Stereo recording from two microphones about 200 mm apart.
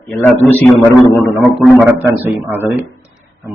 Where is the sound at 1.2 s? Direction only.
Centre (ahead or behind).